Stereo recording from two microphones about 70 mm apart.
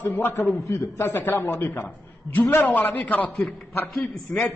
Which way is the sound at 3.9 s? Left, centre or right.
Centre.